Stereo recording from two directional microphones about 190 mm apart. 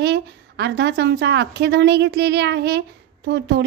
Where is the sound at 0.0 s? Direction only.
65° right (ahead or behind).